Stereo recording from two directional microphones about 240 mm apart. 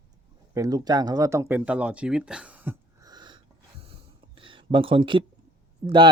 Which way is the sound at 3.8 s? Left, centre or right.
Right.